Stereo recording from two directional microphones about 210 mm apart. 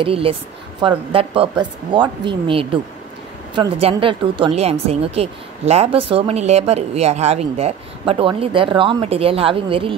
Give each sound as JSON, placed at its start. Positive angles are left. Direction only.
{"t": 0.0, "sound": "a woman's voice", "side_deg": -25}